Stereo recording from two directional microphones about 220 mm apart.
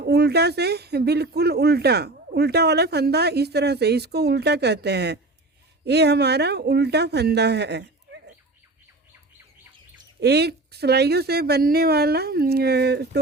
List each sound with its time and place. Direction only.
0.0 s speech: 50° right (ahead or behind)
10.2 s speech: 50° right (ahead or behind)